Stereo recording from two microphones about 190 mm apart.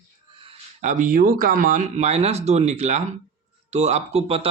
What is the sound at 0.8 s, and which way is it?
Speech, 40° right (ahead or behind).